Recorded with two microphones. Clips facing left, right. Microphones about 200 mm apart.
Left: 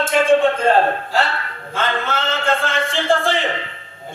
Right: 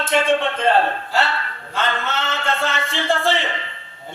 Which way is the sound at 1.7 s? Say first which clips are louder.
Left 2 dB; 50° left (ahead or behind).